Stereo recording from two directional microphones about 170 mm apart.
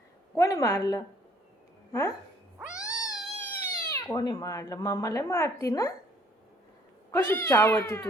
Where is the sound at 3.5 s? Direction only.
15° left (ahead or behind).